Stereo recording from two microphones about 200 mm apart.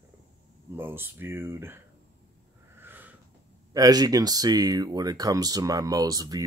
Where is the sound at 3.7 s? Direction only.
20° right (ahead or behind).